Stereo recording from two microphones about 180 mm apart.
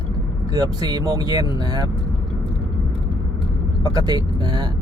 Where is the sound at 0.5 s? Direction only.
20° right (ahead or behind).